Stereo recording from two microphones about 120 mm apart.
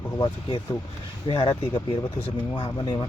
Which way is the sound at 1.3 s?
45° left (ahead or behind).